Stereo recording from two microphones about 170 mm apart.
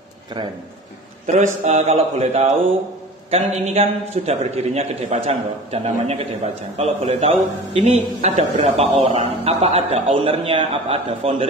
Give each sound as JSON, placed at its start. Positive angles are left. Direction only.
{"t": 1.2, "sound": "a man's voice", "side_deg": -40}